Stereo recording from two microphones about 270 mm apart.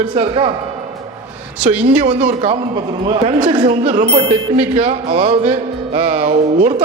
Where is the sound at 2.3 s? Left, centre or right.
Right.